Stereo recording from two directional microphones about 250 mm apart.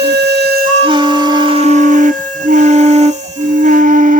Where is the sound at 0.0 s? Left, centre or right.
Right.